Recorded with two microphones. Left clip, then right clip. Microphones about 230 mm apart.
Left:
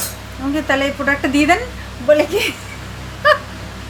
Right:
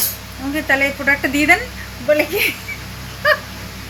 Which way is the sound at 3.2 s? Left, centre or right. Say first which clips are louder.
Left 2 dB; centre.